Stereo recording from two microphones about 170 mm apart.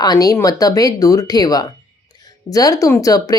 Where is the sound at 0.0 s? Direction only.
20° left (ahead or behind).